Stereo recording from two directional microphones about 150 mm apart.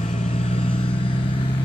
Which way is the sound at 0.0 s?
50° left (ahead or behind).